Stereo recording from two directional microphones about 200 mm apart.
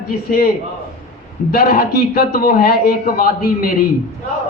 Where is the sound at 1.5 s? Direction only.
50° left (ahead or behind).